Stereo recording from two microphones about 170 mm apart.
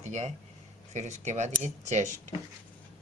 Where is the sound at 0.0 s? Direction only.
40° right (ahead or behind).